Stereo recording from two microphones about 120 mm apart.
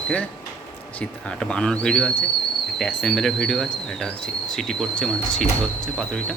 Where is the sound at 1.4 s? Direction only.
5° left (ahead or behind).